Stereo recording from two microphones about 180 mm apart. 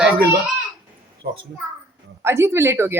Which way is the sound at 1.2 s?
60° right (ahead or behind).